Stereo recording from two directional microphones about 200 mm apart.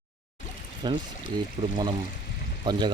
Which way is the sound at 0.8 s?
20° right (ahead or behind).